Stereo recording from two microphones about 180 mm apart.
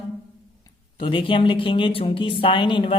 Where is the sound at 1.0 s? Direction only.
30° left (ahead or behind).